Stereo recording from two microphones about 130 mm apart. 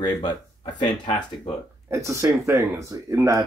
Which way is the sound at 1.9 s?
20° right (ahead or behind).